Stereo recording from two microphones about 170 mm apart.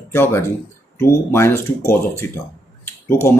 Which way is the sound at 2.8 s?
15° left (ahead or behind).